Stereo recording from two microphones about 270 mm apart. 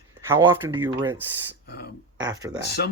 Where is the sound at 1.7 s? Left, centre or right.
Left.